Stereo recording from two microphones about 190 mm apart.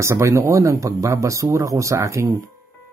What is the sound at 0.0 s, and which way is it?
Speech, 15° right (ahead or behind).